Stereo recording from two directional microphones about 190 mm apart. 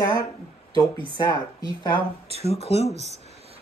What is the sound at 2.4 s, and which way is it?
Speech, 35° left (ahead or behind).